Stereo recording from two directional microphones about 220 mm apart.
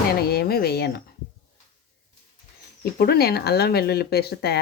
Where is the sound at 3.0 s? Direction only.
45° left (ahead or behind).